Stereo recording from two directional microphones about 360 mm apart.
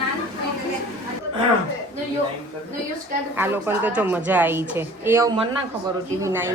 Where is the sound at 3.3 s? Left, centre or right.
Centre.